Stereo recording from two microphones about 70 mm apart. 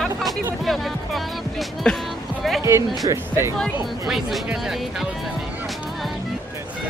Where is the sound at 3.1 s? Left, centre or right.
Right.